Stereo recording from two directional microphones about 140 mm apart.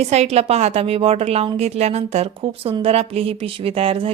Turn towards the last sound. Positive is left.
turn(degrees=-45)  # may be behind; listen again after turning